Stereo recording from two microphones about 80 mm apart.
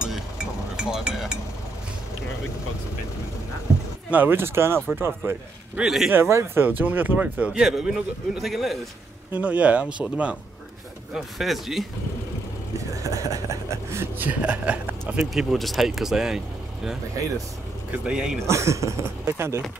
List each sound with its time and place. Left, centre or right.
0.0 s a sound: centre
4.1 s speech: right
5.8 s speech: centre
6.1 s speech: right
7.6 s speech: centre
9.3 s speech: centre
11.1 s speech: centre
12.7 s vehicle: right
14.1 s speech: centre
15.2 s speech: centre
17.9 s speech: centre
18.4 s speech: right